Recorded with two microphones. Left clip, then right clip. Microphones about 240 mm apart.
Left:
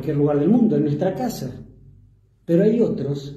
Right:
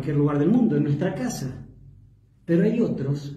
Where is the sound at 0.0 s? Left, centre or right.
Centre.